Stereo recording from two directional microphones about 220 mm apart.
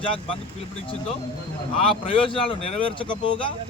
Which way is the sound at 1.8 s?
25° left (ahead or behind).